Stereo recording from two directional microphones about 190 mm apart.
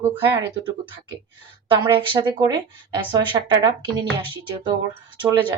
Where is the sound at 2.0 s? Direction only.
25° right (ahead or behind).